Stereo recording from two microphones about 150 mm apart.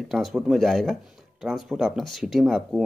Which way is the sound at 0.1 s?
Centre (ahead or behind).